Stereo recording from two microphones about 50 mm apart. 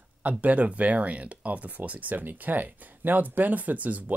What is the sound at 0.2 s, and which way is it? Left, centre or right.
Speech, right.